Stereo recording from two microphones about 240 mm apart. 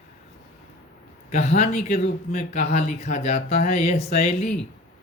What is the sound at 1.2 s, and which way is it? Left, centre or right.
Speech, left.